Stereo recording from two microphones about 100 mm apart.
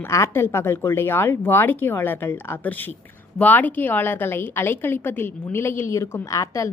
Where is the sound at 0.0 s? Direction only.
25° left (ahead or behind).